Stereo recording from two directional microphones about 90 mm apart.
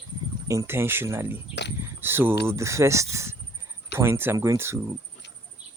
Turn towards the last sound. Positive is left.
turn(degrees=-30)  # may be behind; listen again after turning